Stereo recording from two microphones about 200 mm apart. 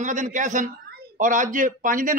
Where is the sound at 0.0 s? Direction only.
40° right (ahead or behind).